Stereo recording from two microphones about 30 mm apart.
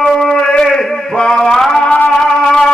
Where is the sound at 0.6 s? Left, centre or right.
Centre.